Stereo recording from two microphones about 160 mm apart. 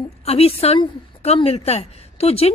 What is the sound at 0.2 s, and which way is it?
A woman's voice, 40° left (ahead or behind).